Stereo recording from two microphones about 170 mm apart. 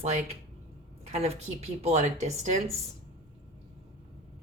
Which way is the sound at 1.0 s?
40° right (ahead or behind).